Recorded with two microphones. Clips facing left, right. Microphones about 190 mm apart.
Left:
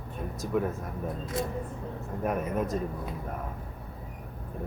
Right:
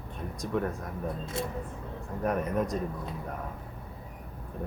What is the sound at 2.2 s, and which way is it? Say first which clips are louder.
Speech: right 1 dB; 5° left (ahead or behind).